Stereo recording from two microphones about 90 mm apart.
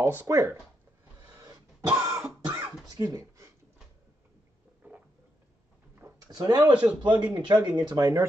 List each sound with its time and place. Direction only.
0.0 s speech: 30° right (ahead or behind)
1.2 s a sound: 45° right (ahead or behind)
1.9 s throat clearing: 15° right (ahead or behind)
2.1 s cough: 20° right (ahead or behind)
2.9 s a sound: 40° right (ahead or behind)
4.8 s a sound: 20° right (ahead or behind)
6.3 s speech: 45° right (ahead or behind)
6.6 s a man's voice: 10° right (ahead or behind)
7.0 s speech: 55° right (ahead or behind)
8.0 s speech: 35° right (ahead or behind)